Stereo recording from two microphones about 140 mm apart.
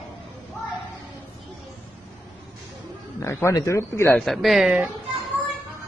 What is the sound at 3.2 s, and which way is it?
Speech, 20° left (ahead or behind).